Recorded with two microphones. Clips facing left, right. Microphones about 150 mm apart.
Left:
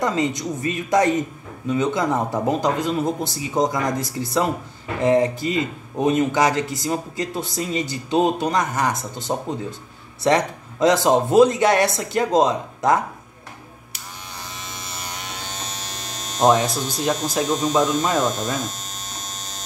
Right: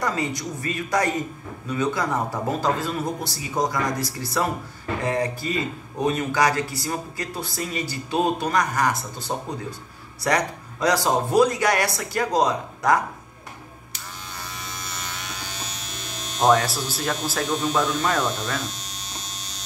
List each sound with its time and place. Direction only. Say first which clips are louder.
0.0 s speech: left 4 dB; 20° left (ahead or behind)
14.5 s electric shaver: left 1 dB; 30° left (ahead or behind)
15.8 s hum: left 2 dB; 40° left (ahead or behind)
16.5 s speech: left 2 dB; 20° left (ahead or behind)
17.5 s speech: left 4 dB; 40° left (ahead or behind)
18.6 s electric shaver: left 4 dB; 45° left (ahead or behind)